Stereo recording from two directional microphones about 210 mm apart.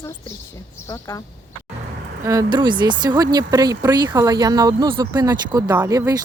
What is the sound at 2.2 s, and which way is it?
Speech, 20° right (ahead or behind).